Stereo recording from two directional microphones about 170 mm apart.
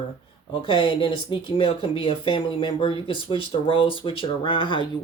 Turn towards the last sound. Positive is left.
turn(degrees=30)  # may be behind; listen again after turning